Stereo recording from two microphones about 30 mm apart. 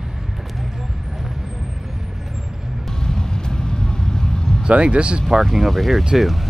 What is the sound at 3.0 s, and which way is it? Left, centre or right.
Vehicle, left.